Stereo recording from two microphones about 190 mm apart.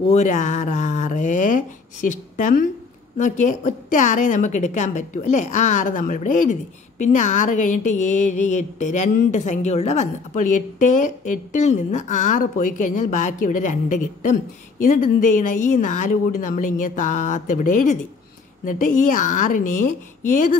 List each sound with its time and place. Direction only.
0.1 s a woman's voice: 40° left (ahead or behind)